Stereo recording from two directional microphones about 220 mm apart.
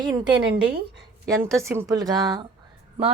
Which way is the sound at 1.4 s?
10° right (ahead or behind).